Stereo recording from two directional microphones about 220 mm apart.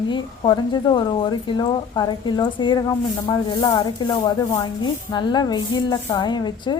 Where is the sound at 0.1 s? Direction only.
20° left (ahead or behind).